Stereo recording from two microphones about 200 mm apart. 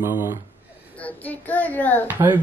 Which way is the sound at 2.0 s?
10° right (ahead or behind).